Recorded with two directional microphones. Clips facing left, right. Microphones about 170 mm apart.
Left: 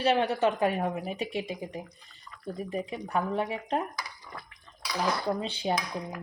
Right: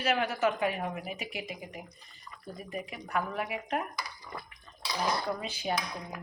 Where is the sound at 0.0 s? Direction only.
35° left (ahead or behind).